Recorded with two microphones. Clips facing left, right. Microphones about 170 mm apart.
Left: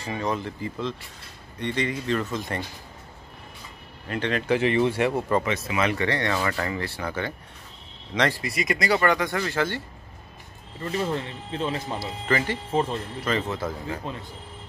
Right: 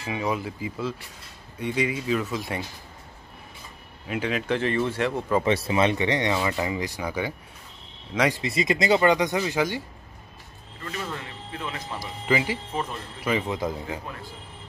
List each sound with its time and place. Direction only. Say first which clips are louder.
0.0 s speech: even; 5° right (ahead or behind)
4.1 s speech: left 2 dB; 5° right (ahead or behind)
4.6 s speech: left 5 dB; 15° left (ahead or behind)
5.4 s speech: right 4 dB; 30° right (ahead or behind); by 7.3 s 10° right (ahead or behind)
8.3 s speech: right 2 dB; 25° right (ahead or behind)
10.8 s speech: left 7 dB; 30° left (ahead or behind)
12.3 s speech: even; 10° right (ahead or behind)